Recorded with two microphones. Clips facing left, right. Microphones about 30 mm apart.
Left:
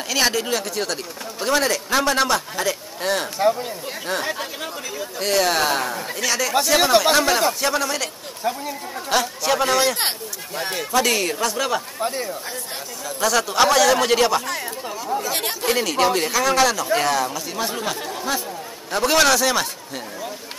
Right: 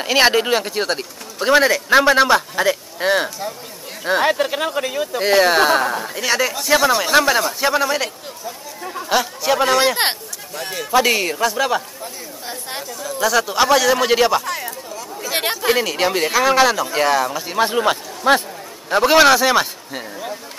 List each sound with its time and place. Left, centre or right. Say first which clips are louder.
0.0 s speech: right 6 dB; right
4.2 s speech: right 9 dB; right
5.2 s speech: right 5 dB; centre
10.5 s a man's voice: left 1 dB; centre
10.9 s speech: right 4 dB; centre
13.0 s speech: right 3 dB; centre
15.3 s speech: right 9 dB; right
17.6 s speech: right 10 dB; right
18.9 s speech: right 5 dB; centre